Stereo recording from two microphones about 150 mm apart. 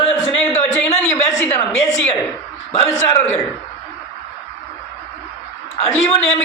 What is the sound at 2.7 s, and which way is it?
Speech, 45° left (ahead or behind).